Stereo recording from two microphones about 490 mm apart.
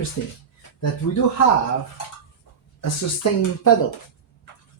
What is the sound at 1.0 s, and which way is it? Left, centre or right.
Speech, left.